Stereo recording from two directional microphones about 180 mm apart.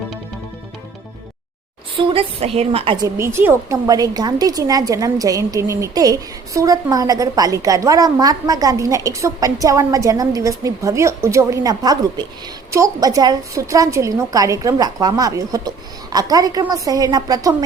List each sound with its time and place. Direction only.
2.0 s a woman's voice: 30° right (ahead or behind)
3.2 s a woman's voice: 15° right (ahead or behind)